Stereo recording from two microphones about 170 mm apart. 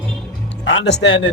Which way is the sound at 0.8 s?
90° left.